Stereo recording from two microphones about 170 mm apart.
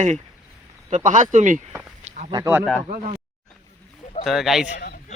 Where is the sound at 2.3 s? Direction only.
15° right (ahead or behind).